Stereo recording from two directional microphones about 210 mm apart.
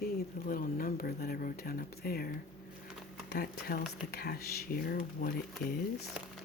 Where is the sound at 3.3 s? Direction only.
45° left (ahead or behind).